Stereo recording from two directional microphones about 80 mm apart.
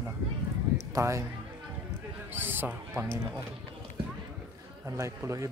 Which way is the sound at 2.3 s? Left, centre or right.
Right.